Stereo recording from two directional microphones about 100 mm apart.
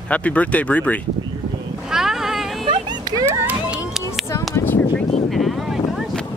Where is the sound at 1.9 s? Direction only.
5° right (ahead or behind).